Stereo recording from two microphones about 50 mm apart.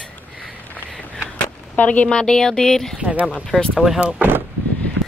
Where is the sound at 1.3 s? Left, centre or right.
Left.